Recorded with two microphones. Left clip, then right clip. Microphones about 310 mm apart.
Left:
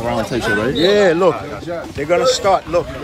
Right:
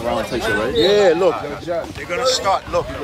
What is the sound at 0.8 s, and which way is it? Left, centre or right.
Speech, left.